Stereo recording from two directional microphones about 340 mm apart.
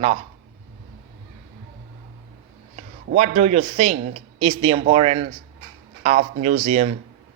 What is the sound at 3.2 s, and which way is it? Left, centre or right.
Speech, centre.